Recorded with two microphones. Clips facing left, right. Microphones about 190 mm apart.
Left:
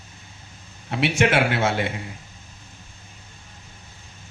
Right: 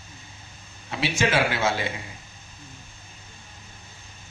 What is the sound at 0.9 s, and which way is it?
Speech, 65° left (ahead or behind).